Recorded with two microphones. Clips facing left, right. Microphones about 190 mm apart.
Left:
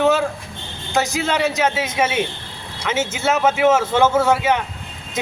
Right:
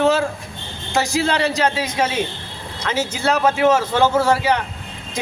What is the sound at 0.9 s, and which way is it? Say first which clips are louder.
A man's voice: right 1 dB; centre (ahead or behind).